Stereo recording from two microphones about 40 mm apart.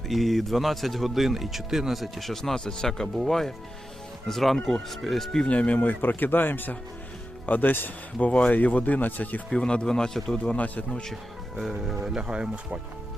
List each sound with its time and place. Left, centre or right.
0.1 s speech: centre
5.5 s speech: left
6.0 s speech: left
8.3 s speech: left
9.5 s speech: left
10.5 s speech: left
11.1 s speech: centre
12.3 s speech: right